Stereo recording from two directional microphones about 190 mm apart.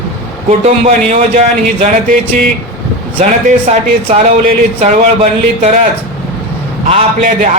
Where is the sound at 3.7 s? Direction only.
35° right (ahead or behind).